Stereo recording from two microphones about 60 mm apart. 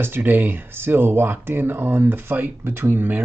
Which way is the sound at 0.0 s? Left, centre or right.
Right.